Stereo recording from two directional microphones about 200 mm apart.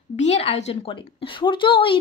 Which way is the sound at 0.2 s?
30° left (ahead or behind).